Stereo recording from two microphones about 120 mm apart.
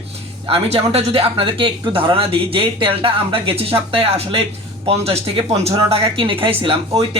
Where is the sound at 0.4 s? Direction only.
50° right (ahead or behind).